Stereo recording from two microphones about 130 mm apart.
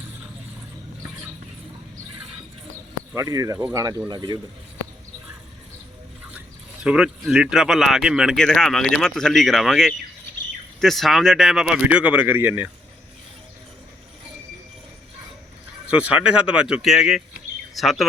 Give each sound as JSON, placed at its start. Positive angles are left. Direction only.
{"t": 3.2, "sound": "speech", "side_deg": -25}
{"t": 6.8, "sound": "speech", "side_deg": -5}
{"t": 15.9, "sound": "speech", "side_deg": -10}